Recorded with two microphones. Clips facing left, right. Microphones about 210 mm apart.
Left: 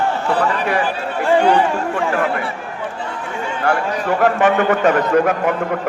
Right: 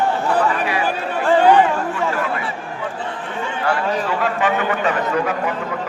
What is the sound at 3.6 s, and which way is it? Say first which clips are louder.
A man's voice: left 2 dB; 50° left (ahead or behind).